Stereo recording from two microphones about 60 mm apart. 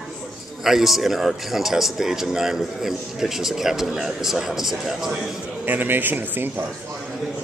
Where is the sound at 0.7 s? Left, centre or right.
Centre.